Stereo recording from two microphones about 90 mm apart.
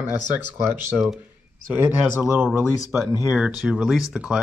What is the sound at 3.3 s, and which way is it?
Speech, 10° right (ahead or behind).